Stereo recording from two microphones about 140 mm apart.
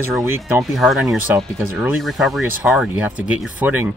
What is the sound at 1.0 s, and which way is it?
Speech, 15° right (ahead or behind).